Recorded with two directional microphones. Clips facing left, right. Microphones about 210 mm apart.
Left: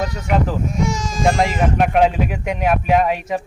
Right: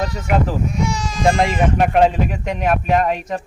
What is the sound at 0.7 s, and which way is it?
Speech, 45° left (ahead or behind).